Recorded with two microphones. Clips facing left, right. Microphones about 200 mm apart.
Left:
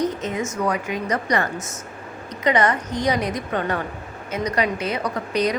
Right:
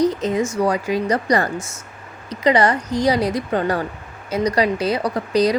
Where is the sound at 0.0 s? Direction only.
35° right (ahead or behind).